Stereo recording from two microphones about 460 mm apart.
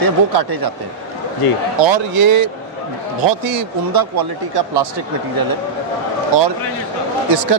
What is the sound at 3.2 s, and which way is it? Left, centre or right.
Speech, right.